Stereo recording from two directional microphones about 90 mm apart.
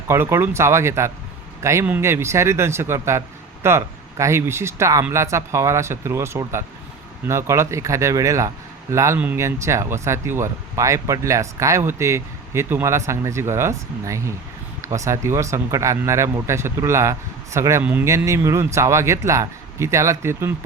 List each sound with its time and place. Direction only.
0.1 s speech: 30° right (ahead or behind)
9.1 s speech: 20° right (ahead or behind)
9.4 s speech: 35° right (ahead or behind)